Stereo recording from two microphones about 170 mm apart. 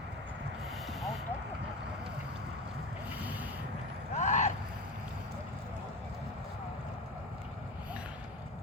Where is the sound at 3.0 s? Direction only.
10° right (ahead or behind).